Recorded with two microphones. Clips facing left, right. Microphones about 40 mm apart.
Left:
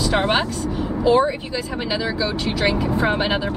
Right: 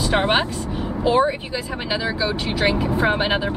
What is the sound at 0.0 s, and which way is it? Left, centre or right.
Speech, centre.